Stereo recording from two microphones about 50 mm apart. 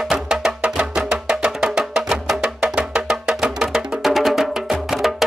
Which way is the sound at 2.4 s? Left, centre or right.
Centre.